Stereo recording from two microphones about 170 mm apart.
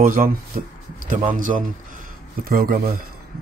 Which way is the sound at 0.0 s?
55° right (ahead or behind).